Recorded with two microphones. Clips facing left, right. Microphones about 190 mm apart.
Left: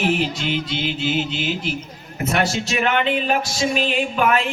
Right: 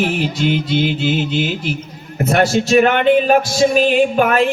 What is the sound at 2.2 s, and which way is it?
Speech, 55° right (ahead or behind).